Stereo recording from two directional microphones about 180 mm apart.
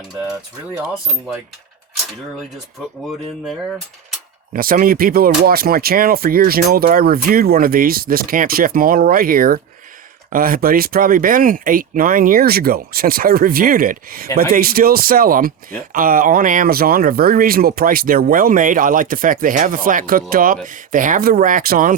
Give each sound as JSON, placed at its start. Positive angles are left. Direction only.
{"t": 4.5, "sound": "speech", "side_deg": -50}